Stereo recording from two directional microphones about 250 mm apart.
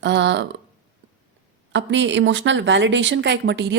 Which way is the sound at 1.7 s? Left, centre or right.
Right.